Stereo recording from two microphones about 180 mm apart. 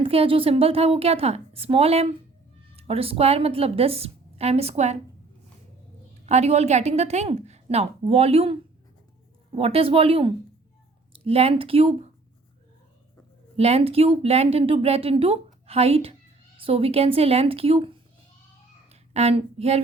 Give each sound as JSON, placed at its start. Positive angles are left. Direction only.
{"t": 0.0, "sound": "a woman's voice", "side_deg": -30}
{"t": 6.2, "sound": "a woman's voice", "side_deg": -40}
{"t": 9.6, "sound": "a woman's voice", "side_deg": -30}
{"t": 13.6, "sound": "a woman's voice", "side_deg": -35}
{"t": 18.9, "sound": "a sound", "side_deg": -35}